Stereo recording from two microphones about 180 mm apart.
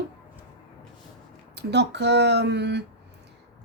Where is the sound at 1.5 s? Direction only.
70° right (ahead or behind).